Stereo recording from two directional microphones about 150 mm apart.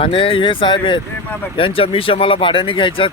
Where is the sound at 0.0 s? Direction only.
35° left (ahead or behind).